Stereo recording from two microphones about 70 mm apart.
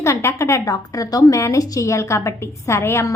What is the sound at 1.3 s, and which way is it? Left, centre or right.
A woman's voice, left.